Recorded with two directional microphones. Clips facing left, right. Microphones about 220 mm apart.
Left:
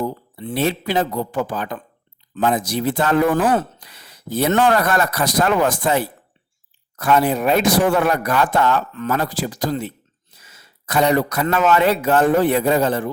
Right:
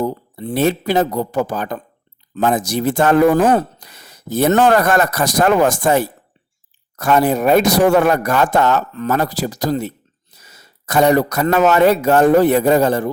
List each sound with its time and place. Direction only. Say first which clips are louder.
0.0 s speech: right 4 dB; 40° right (ahead or behind)